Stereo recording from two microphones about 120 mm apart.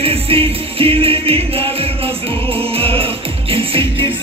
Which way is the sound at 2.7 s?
50° right (ahead or behind).